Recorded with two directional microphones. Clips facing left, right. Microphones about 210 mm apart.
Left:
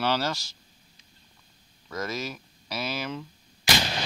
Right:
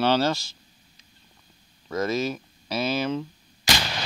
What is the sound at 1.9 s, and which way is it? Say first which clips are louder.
Speech: right 7 dB; 25° right (ahead or behind).